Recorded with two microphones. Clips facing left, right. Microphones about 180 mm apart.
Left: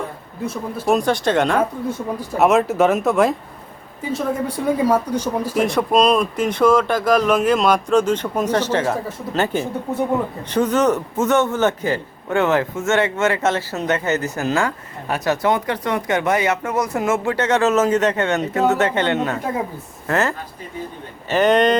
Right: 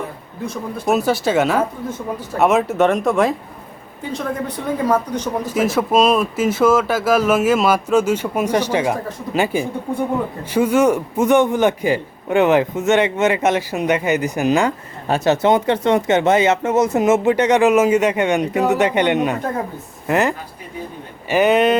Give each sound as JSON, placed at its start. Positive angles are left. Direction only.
{"t": 0.4, "sound": "speech", "side_deg": 5}
{"t": 5.5, "sound": "a man's voice", "side_deg": -5}